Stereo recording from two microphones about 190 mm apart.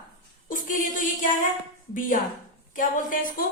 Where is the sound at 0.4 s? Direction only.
45° left (ahead or behind).